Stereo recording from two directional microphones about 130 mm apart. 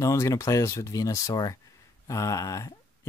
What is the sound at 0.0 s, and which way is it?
Speech, 25° left (ahead or behind).